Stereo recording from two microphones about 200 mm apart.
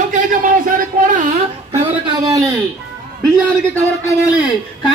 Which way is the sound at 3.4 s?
5° left (ahead or behind).